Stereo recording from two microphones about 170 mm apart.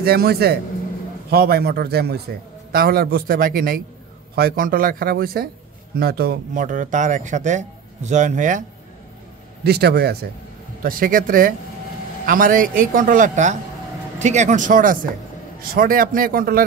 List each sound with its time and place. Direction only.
0.0 s speech: 65° right (ahead or behind); by 8.6 s 50° right (ahead or behind)
9.7 s speech: 70° right (ahead or behind)
10.8 s speech: 55° right (ahead or behind)